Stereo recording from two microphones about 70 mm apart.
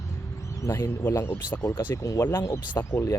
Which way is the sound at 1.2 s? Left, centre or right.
Left.